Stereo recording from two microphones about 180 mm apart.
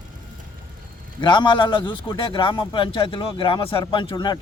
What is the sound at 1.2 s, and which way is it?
A man's voice, 25° left (ahead or behind).